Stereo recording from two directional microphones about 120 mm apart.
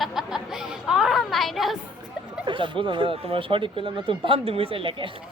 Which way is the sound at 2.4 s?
45° right (ahead or behind).